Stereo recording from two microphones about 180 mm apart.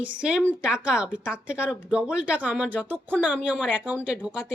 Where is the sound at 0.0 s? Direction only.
5° right (ahead or behind).